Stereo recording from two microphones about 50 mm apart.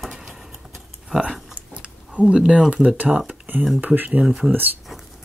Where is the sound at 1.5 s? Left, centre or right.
Right.